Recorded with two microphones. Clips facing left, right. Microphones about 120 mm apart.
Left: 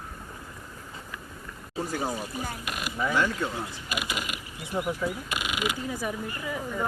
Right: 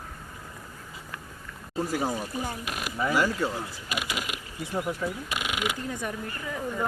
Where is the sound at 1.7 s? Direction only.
5° right (ahead or behind).